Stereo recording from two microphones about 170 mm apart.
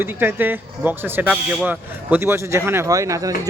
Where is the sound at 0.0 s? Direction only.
10° right (ahead or behind).